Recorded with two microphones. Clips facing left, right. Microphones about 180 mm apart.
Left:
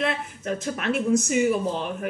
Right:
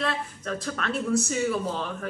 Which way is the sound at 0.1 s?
20° left (ahead or behind).